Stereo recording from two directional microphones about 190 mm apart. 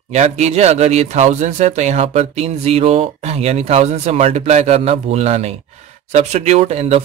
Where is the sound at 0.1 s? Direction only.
35° right (ahead or behind).